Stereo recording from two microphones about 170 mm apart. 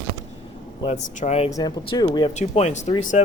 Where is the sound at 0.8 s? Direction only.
40° left (ahead or behind).